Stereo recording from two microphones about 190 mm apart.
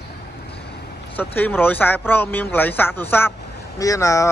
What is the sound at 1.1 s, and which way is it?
Speech, 10° left (ahead or behind).